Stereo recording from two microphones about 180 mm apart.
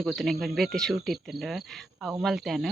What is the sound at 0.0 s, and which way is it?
Speech, centre (ahead or behind).